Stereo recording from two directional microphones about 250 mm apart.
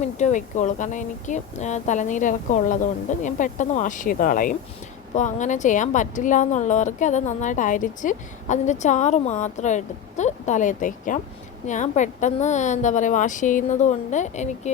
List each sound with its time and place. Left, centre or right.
0.0 s speech: left